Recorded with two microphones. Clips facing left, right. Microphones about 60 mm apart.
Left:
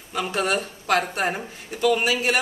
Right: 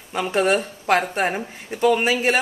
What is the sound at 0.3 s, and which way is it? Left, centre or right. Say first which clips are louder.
A man's voice: right 6 dB; right.